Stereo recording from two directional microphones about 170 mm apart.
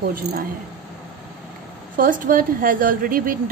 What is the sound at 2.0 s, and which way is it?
A woman's voice, 55° right (ahead or behind).